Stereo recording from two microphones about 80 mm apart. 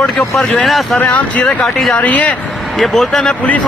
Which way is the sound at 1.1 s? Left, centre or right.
Centre.